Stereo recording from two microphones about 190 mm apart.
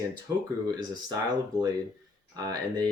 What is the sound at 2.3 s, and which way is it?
Speech, 20° right (ahead or behind).